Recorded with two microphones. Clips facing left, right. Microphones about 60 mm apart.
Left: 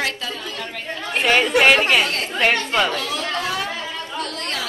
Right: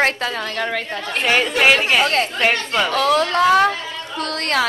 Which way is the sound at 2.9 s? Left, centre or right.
Right.